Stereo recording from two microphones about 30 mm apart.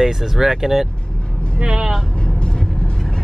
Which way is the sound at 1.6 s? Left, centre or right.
Right.